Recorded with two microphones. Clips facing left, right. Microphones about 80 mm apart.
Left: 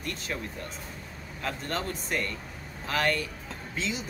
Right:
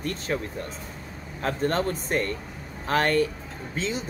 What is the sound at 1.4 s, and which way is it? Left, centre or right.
Speech, right.